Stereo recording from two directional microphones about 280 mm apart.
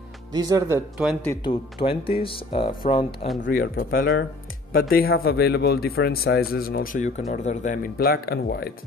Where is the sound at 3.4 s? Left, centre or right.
Left.